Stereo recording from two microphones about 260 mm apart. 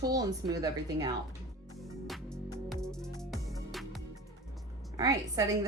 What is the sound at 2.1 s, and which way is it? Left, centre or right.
Music, centre.